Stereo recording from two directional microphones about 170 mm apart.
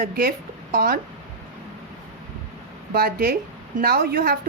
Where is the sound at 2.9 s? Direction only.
65° right (ahead or behind).